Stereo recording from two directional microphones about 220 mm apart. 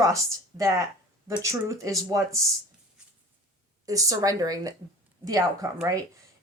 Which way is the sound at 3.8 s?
15° right (ahead or behind).